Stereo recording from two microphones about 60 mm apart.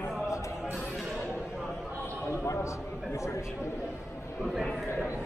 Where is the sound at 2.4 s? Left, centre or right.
Left.